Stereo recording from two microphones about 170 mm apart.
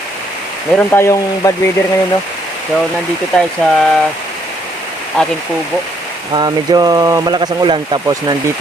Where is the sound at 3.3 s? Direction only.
Centre (ahead or behind).